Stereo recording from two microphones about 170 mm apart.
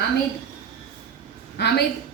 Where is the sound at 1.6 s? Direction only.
80° left.